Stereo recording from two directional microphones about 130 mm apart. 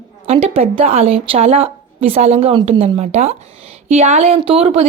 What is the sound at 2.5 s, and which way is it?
A woman's voice, 40° right (ahead or behind).